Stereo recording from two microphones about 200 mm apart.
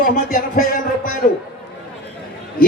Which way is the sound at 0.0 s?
45° left (ahead or behind).